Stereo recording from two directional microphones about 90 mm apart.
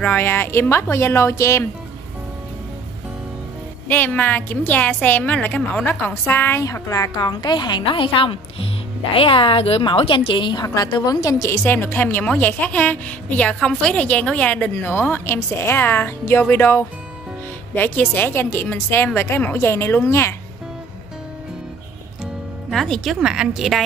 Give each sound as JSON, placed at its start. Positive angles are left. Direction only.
{"t": 0.0, "sound": "a woman's voice", "side_deg": 20}
{"t": 3.9, "sound": "a woman's voice", "side_deg": 20}
{"t": 6.6, "sound": "a woman's voice", "side_deg": 35}
{"t": 7.8, "sound": "a woman's voice", "side_deg": 75}
{"t": 22.7, "sound": "speech", "side_deg": 5}